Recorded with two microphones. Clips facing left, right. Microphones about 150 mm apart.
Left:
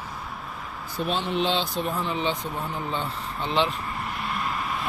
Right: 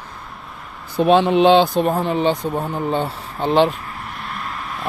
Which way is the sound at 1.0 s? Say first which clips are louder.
Right 13 dB; 75° right (ahead or behind).